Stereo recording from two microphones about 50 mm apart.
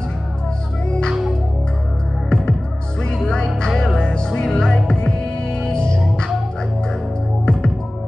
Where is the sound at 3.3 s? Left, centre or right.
Centre.